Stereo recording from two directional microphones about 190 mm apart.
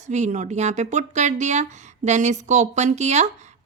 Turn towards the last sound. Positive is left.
turn(degrees=-35)  # may be behind; listen again after turning